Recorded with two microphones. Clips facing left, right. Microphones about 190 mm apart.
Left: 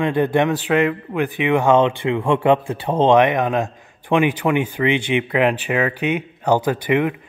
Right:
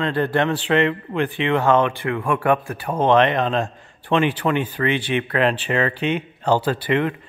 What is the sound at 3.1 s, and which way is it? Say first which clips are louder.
Speech: left 1 dB; 10° left (ahead or behind).